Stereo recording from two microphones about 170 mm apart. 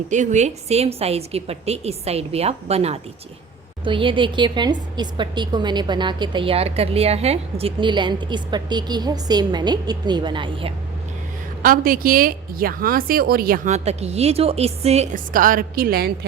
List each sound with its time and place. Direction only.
0.1 s a woman's voice: 45° right (ahead or behind); by 10.7 s 30° right (ahead or behind)
11.6 s a woman's voice: 55° right (ahead or behind)
13.7 s a woman's voice: 40° right (ahead or behind); by 16.1 s 65° right (ahead or behind)